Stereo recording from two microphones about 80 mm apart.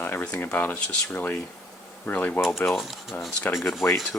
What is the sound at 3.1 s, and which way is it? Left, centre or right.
Speech, left.